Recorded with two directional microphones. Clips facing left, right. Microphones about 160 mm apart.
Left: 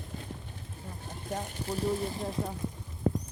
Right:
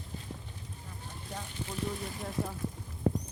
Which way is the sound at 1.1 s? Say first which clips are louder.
Left 6 dB; 45° left (ahead or behind).